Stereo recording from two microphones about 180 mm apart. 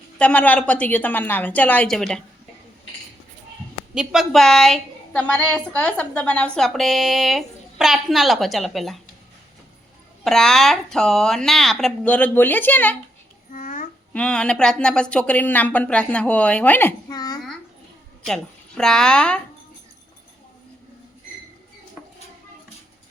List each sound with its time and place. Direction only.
0.2 s speech: 5° left (ahead or behind)
3.9 s a woman's voice: centre (ahead or behind)
10.2 s a woman's voice: centre (ahead or behind)
13.5 s babbling: 45° left (ahead or behind)
14.1 s speech: 5° left (ahead or behind)
17.1 s babbling: 20° left (ahead or behind)
18.3 s a woman's voice: 5° left (ahead or behind)